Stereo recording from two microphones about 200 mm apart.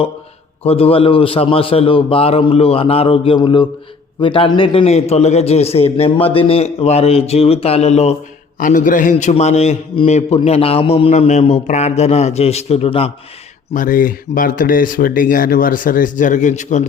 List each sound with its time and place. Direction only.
0.6 s a man's voice: 30° left (ahead or behind)
13.7 s speech: 45° left (ahead or behind)